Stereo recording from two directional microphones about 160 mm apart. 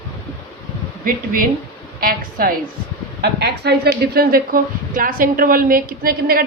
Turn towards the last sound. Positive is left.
turn(degrees=-70)  # may be behind; listen again after turning